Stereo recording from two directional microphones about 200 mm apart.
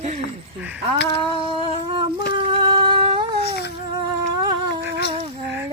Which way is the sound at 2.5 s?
25° right (ahead or behind).